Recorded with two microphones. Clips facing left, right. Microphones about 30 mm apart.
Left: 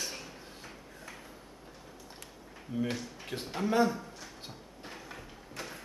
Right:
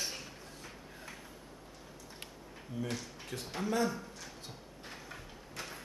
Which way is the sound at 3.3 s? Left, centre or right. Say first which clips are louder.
Left 5 dB; left.